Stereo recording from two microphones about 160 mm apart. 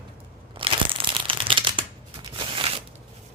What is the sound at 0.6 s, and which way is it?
Shuffling cards, 35° right (ahead or behind).